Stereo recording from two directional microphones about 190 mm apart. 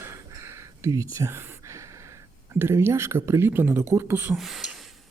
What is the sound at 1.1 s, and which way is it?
Speech, 15° right (ahead or behind).